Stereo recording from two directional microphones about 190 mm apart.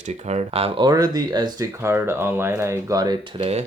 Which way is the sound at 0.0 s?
35° right (ahead or behind).